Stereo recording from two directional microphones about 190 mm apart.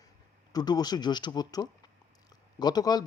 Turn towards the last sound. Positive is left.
turn(degrees=20)  # may be behind; listen again after turning